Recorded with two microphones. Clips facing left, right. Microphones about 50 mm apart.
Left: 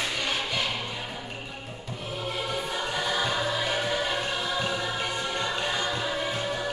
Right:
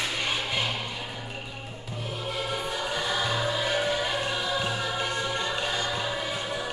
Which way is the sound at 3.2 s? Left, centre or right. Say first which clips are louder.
Even; centre.